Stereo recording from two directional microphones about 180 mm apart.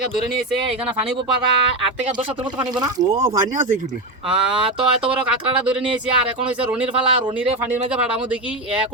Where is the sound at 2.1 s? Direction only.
25° right (ahead or behind).